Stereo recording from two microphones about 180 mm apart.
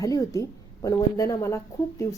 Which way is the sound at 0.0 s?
20° left (ahead or behind).